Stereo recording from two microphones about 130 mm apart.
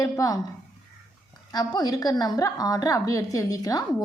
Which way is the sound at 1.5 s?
30° left (ahead or behind).